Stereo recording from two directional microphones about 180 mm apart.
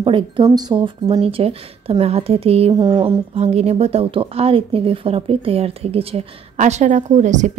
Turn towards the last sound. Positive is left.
turn(degrees=-40)  # may be behind; listen again after turning